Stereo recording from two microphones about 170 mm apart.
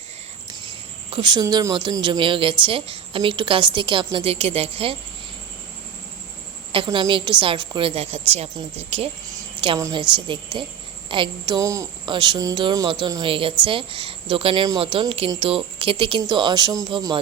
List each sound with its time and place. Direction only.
1.1 s a woman's voice: 25° right (ahead or behind)
6.7 s a woman's voice: 30° right (ahead or behind)
9.3 s a sound: 25° right (ahead or behind)
9.8 s a woman's voice: 30° right (ahead or behind)